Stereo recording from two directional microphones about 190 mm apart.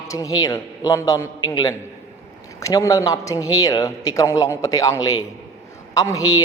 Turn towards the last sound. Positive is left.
turn(degrees=20)  # may be behind; listen again after turning